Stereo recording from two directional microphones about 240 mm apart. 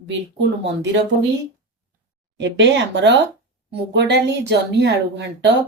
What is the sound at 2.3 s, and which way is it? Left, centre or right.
Speech, right.